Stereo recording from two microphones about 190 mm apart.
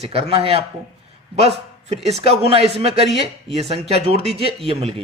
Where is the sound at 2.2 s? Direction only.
30° right (ahead or behind).